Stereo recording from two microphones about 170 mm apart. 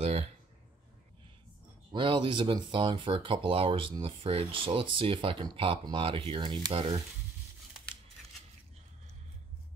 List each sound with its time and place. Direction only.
1.9 s speech: 25° right (ahead or behind)